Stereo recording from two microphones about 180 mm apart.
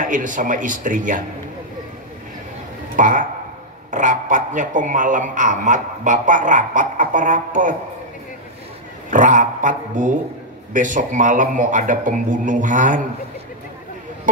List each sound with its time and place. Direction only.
0.0 s a man's voice: 45° right (ahead or behind)
3.0 s a man's voice: 45° right (ahead or behind)
9.1 s a man's voice: 45° right (ahead or behind)